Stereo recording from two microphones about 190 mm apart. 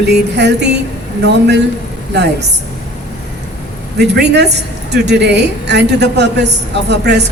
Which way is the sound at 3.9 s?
60° right (ahead or behind).